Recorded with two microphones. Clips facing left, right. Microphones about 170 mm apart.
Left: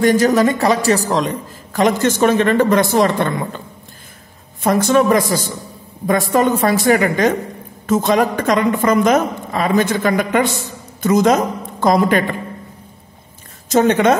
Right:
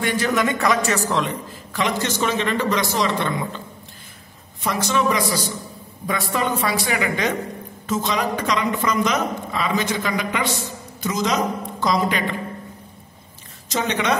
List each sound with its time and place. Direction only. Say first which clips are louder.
0.0 s a woman's voice: left 8 dB; 40° left (ahead or behind)
4.6 s a woman's voice: left 8 dB; 50° left (ahead or behind)
13.7 s a woman's voice: left 10 dB; 50° left (ahead or behind)